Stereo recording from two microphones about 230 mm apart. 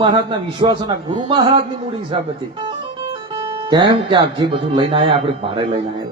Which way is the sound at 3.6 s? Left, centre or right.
Centre.